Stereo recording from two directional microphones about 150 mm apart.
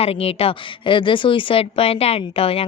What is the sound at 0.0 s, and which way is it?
Speech, 40° left (ahead or behind).